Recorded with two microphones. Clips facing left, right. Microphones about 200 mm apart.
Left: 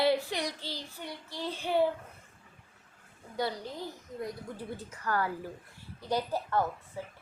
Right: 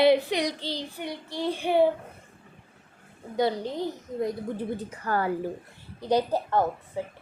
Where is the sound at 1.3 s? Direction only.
65° right (ahead or behind).